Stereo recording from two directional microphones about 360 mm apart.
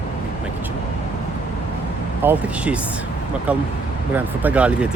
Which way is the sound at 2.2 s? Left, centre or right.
Centre.